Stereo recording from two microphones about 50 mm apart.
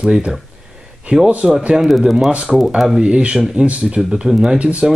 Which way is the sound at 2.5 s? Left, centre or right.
Centre.